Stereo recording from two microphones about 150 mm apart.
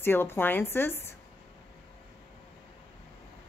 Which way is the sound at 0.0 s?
15° left (ahead or behind).